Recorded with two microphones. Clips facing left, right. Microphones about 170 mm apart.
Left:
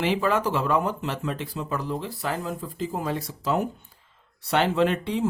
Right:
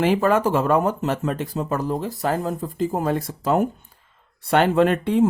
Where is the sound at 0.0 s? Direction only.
50° right (ahead or behind).